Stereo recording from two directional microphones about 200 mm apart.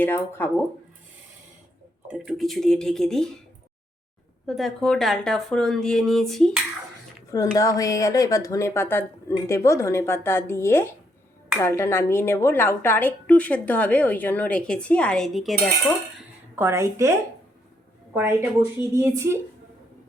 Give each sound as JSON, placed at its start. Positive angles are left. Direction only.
{"t": 0.0, "sound": "a woman's voice", "side_deg": 10}
{"t": 2.0, "sound": "speech", "side_deg": 0}
{"t": 4.4, "sound": "speech", "side_deg": 0}
{"t": 7.5, "sound": "a woman's voice", "side_deg": 15}
{"t": 16.6, "sound": "a woman's voice", "side_deg": -15}
{"t": 18.1, "sound": "a woman's voice", "side_deg": -15}